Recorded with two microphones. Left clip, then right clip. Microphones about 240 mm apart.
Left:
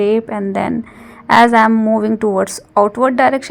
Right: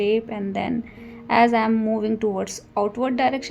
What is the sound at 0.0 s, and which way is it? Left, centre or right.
A woman's voice, left.